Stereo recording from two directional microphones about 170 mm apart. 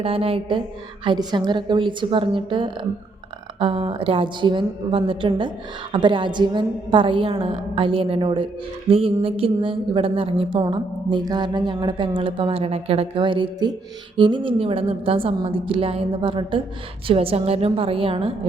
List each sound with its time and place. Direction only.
0.0 s a woman's voice: 35° right (ahead or behind)